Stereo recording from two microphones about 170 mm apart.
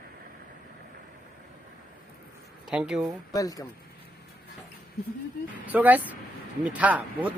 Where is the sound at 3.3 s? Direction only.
20° left (ahead or behind).